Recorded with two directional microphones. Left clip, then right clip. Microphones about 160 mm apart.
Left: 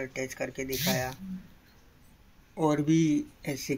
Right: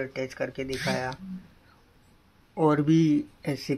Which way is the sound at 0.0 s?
25° right (ahead or behind).